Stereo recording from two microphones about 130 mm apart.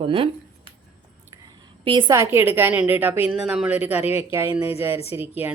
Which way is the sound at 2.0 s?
20° right (ahead or behind).